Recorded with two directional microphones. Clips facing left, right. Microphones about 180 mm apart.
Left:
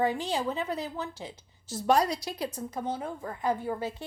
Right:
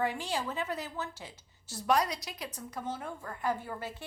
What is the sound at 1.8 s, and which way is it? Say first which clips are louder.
A woman's voice: left 4 dB; 30° left (ahead or behind).